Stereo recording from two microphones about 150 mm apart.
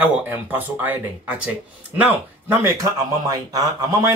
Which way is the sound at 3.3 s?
25° right (ahead or behind).